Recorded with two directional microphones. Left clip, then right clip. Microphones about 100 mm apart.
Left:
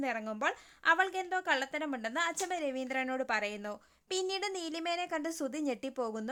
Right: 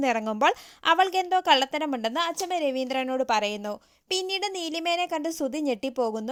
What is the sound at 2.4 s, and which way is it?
A woman's voice, 45° right (ahead or behind).